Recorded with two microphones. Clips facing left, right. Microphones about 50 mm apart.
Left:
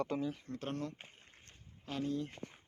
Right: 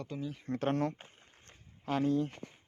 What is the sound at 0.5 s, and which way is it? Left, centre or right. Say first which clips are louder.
Speech: right 9 dB; right.